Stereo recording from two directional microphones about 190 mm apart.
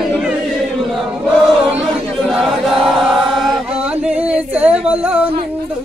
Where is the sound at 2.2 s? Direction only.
Centre (ahead or behind).